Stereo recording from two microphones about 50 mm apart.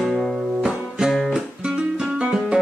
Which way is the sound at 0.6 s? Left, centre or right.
Centre.